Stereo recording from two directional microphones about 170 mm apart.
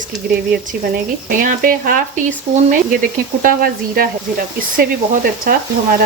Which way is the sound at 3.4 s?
60° right (ahead or behind).